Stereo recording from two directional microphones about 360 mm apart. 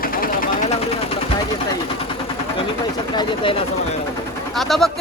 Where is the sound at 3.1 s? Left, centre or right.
Centre.